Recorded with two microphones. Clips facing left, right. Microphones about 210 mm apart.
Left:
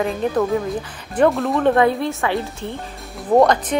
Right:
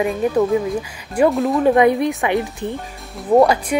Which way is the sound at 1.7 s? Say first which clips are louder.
Right 3 dB; 15° right (ahead or behind).